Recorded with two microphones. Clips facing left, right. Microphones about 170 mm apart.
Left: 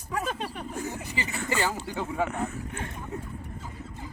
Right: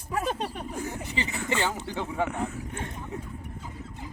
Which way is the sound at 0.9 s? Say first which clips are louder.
Right 1 dB; 10° left (ahead or behind).